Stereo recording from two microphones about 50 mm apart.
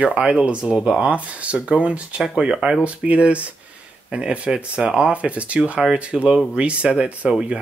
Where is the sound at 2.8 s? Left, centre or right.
Right.